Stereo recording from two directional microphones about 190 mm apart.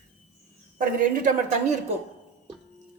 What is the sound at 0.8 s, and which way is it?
Speech, 45° right (ahead or behind).